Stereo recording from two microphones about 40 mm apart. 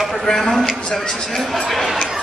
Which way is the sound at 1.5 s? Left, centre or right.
Centre.